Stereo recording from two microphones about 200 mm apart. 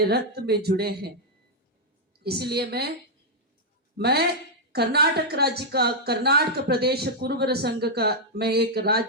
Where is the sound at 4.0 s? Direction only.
55° right (ahead or behind).